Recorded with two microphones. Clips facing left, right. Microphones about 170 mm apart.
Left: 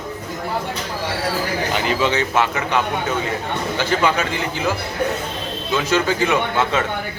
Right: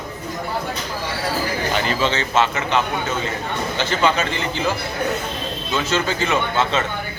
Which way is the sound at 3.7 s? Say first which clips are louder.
Even; 10° left (ahead or behind).